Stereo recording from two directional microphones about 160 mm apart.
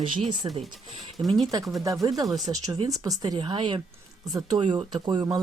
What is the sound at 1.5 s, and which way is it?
Speech, 20° right (ahead or behind).